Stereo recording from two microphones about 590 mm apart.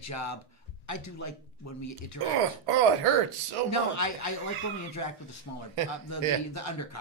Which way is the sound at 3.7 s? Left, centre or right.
Left.